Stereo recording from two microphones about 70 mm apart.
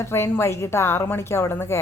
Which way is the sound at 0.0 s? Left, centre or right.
Left.